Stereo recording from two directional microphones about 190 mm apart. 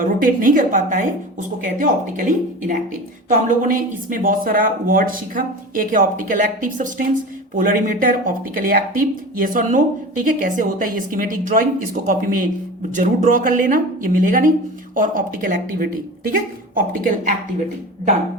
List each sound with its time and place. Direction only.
0.0 s speech: 45° right (ahead or behind)